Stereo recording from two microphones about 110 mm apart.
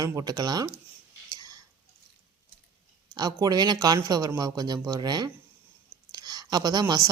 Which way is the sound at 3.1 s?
35° right (ahead or behind).